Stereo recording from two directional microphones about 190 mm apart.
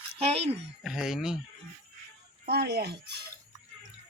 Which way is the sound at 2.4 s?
55° right (ahead or behind).